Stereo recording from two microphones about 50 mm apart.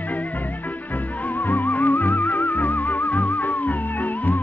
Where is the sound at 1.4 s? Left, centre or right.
Left.